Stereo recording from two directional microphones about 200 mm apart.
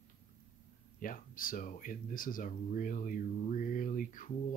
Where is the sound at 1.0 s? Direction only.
45° left (ahead or behind).